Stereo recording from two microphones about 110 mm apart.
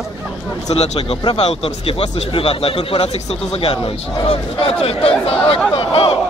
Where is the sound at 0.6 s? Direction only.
70° left (ahead or behind).